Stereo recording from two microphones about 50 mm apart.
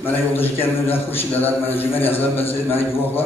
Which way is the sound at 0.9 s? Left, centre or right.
Left.